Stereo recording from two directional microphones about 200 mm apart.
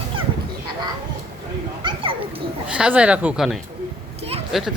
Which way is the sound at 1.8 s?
25° right (ahead or behind).